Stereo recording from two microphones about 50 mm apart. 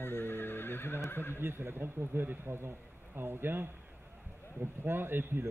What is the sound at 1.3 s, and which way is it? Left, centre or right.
Speech, right.